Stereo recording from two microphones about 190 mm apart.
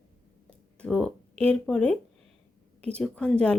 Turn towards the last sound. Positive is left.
turn(degrees=5)  # may be behind; listen again after turning